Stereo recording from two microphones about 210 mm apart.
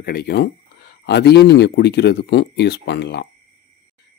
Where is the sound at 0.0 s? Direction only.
50° left (ahead or behind).